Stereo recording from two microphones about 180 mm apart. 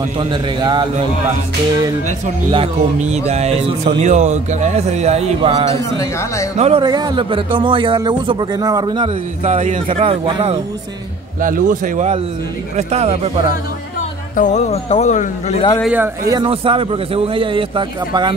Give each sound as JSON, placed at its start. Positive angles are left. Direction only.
{"t": 0.2, "sound": "speech", "side_deg": -25}
{"t": 2.5, "sound": "speech", "side_deg": -35}
{"t": 6.8, "sound": "speech", "side_deg": -25}
{"t": 9.4, "sound": "a man's voice", "side_deg": -40}
{"t": 9.8, "sound": "speech", "side_deg": -30}
{"t": 11.4, "sound": "a man's voice", "side_deg": -50}
{"t": 14.3, "sound": "speech", "side_deg": 45}
{"t": 15.8, "sound": "speech", "side_deg": -5}
{"t": 16.3, "sound": "speech", "side_deg": -25}